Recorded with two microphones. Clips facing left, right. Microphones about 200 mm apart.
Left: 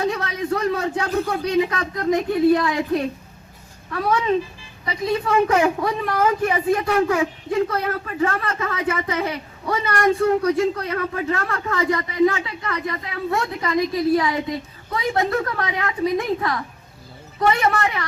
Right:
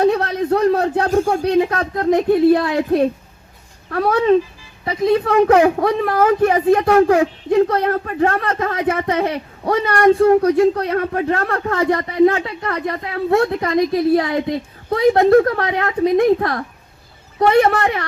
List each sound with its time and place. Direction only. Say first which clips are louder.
0.3 s a sound: right 7 dB; 55° right (ahead or behind)
1.0 s speech: right 6 dB; 45° right (ahead or behind)
5.6 s speech: right 5 dB; 45° right (ahead or behind); by 7.9 s 65° right (ahead or behind)
7.9 s speech: right 5 dB; 50° right (ahead or behind)